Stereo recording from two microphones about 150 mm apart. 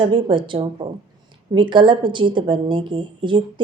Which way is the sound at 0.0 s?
30° right (ahead or behind).